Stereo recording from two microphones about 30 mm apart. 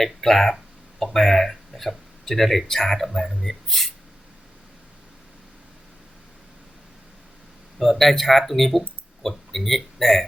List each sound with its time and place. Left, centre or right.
0.0 s speech: centre
7.9 s speech: centre